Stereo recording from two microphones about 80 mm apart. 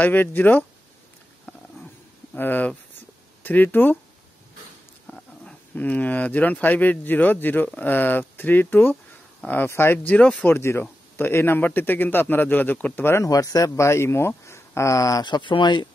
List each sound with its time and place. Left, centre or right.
0.0 s speech: left
1.5 s a sound: centre
2.3 s speech: left
5.0 s dog: centre
5.8 s speech: left
10.1 s speech: centre
10.5 s speech: left
13.2 s speech: left
13.8 s speech: left
15.2 s speech: left